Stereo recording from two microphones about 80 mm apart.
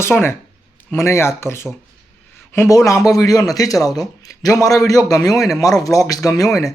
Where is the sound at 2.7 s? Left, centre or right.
Left.